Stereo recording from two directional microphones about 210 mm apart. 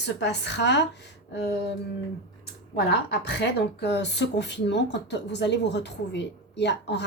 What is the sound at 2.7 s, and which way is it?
Speech, 50° left (ahead or behind).